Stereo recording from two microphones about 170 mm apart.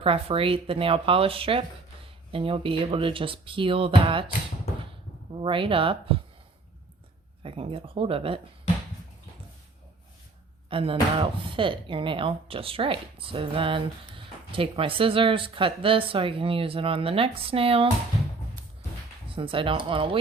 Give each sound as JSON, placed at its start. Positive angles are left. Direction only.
{"t": 0.0, "sound": "speech", "side_deg": -35}
{"t": 5.4, "sound": "speech", "side_deg": -30}
{"t": 7.4, "sound": "speech", "side_deg": -30}
{"t": 10.7, "sound": "speech", "side_deg": -30}
{"t": 19.3, "sound": "speech", "side_deg": -30}